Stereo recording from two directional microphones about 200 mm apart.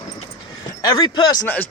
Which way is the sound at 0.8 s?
20° left (ahead or behind).